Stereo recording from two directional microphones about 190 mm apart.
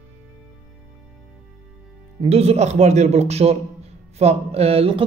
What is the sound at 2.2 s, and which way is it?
A man's voice, 35° right (ahead or behind).